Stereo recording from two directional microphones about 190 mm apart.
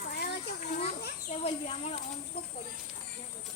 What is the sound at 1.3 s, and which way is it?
Speech, 35° left (ahead or behind).